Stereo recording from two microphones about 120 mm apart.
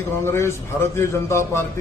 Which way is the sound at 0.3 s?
20° left (ahead or behind).